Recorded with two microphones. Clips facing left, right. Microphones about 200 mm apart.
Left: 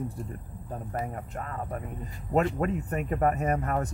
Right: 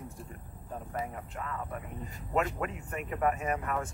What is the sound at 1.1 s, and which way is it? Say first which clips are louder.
Speech: left 3 dB; 40° left (ahead or behind).